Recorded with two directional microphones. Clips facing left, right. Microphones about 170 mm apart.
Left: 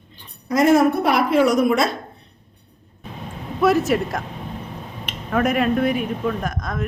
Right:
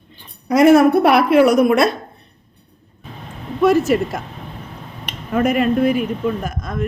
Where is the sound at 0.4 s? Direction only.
70° right (ahead or behind).